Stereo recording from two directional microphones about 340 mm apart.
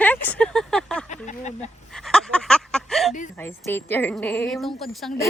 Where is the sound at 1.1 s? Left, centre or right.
Left.